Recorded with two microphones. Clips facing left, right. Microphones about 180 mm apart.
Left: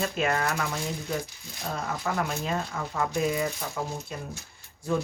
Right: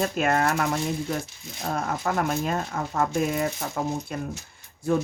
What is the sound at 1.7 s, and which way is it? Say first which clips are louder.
Speech: right 4 dB; 50° right (ahead or behind).